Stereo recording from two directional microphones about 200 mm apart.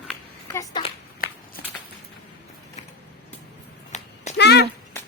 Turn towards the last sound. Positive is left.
turn(degrees=55)  # may be behind; listen again after turning